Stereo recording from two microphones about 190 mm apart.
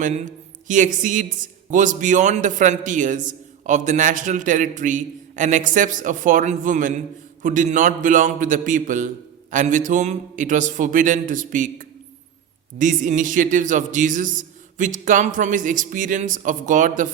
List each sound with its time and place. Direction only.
0.0 s a man's voice: 40° right (ahead or behind)